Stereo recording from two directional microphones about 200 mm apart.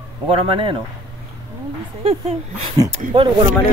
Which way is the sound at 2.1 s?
30° right (ahead or behind).